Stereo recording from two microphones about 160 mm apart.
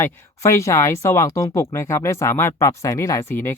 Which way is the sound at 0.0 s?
20° left (ahead or behind).